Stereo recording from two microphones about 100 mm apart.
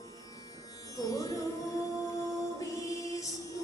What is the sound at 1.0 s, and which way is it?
Music, 35° left (ahead or behind).